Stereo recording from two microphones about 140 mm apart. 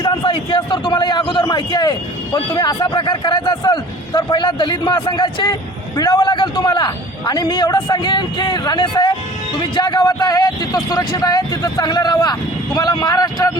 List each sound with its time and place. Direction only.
0.0 s a man's voice: 30° left (ahead or behind)